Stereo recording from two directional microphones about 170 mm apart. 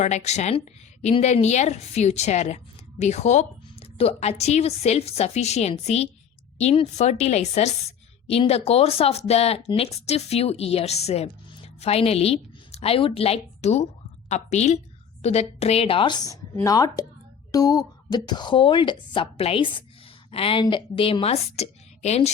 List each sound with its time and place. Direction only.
0.0 s a woman's voice: 40° left (ahead or behind)